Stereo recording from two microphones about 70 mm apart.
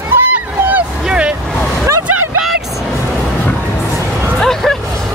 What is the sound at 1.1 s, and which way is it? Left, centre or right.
Vehicle, centre.